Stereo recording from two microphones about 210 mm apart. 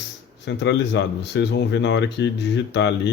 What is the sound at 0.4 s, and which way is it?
A man's voice, 55° left (ahead or behind).